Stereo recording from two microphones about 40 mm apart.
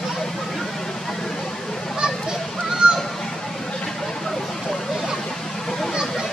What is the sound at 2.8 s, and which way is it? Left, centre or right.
Honk, right.